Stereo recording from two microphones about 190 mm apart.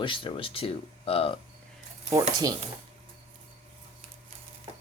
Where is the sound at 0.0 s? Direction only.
25° left (ahead or behind).